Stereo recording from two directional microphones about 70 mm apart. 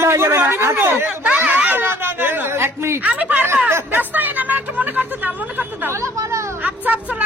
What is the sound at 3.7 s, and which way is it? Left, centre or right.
Speech, right.